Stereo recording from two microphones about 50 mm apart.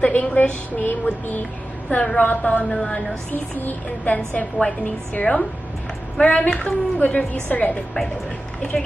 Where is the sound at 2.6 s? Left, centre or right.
Centre.